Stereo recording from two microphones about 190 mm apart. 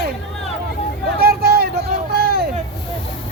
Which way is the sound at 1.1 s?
55° right (ahead or behind).